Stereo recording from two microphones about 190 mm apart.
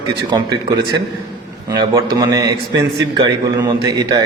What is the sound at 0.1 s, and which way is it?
Speech, 20° right (ahead or behind).